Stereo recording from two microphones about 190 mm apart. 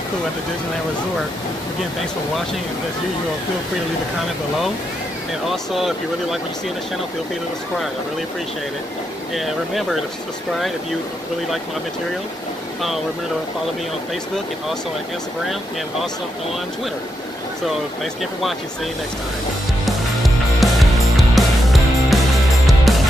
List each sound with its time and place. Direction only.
5.5 s speech: centre (ahead or behind)
9.3 s speech: centre (ahead or behind)
19.8 s music: centre (ahead or behind)